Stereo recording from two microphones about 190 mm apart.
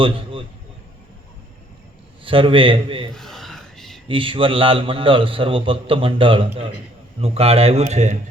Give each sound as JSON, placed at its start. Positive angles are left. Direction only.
{"t": 0.0, "sound": "a man's voice", "side_deg": -25}
{"t": 2.2, "sound": "a man's voice", "side_deg": -30}
{"t": 3.2, "sound": "whispering", "side_deg": 0}
{"t": 4.1, "sound": "a man's voice", "side_deg": -25}